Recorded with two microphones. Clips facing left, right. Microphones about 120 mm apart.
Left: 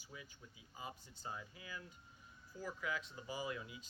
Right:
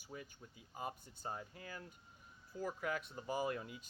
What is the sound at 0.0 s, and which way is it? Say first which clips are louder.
Speech: right 5 dB; 45° right (ahead or behind).